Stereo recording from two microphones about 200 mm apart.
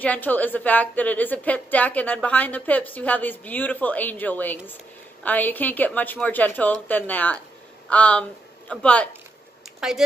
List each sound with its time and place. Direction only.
0.0 s a woman's voice: 10° left (ahead or behind)